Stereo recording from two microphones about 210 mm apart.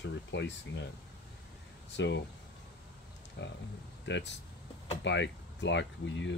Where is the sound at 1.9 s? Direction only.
60° left (ahead or behind).